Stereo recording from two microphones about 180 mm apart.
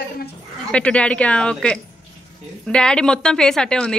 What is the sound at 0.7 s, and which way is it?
A woman's voice, 5° left (ahead or behind).